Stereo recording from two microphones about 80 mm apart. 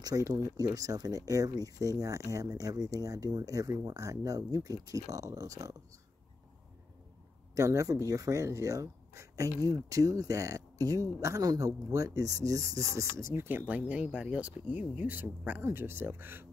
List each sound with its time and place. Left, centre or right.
0.0 s speech: right
7.5 s speech: right